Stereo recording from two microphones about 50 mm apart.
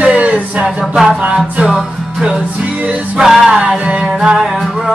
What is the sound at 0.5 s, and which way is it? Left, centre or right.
Music, centre.